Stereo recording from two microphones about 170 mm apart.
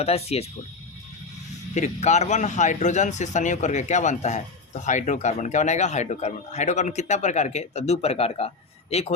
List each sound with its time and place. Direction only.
0.0 s speech: 35° left (ahead or behind)
1.7 s a man's voice: 45° left (ahead or behind)